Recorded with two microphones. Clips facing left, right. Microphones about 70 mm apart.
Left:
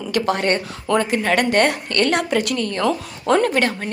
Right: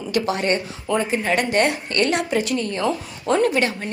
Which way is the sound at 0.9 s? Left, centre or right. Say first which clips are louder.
Left 3 dB; left.